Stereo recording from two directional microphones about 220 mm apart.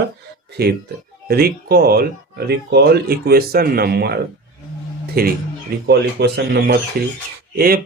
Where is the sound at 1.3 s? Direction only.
45° right (ahead or behind).